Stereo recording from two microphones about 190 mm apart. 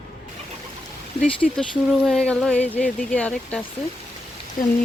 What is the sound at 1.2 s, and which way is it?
Speech, 30° left (ahead or behind).